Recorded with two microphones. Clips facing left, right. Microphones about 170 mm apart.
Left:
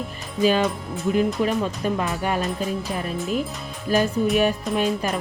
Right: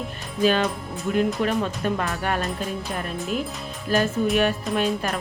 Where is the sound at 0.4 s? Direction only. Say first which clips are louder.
Left 1 dB; 5° left (ahead or behind).